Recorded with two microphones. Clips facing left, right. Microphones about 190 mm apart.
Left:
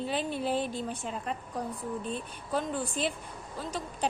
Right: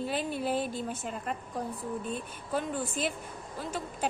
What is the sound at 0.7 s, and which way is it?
Speech, 45° right (ahead or behind).